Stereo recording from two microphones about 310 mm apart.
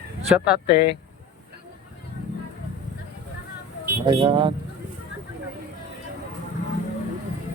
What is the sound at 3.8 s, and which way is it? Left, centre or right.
Speech, centre.